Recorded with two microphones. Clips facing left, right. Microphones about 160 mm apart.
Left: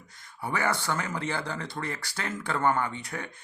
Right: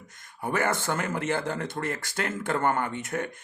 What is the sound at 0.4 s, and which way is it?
Speech, 50° right (ahead or behind).